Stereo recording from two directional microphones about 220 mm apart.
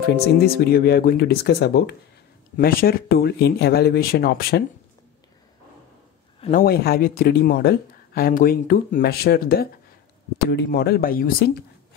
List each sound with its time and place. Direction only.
0.2 s speech: 45° left (ahead or behind)
6.5 s speech: 45° left (ahead or behind)